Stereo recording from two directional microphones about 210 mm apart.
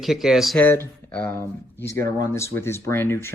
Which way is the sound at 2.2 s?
15° left (ahead or behind).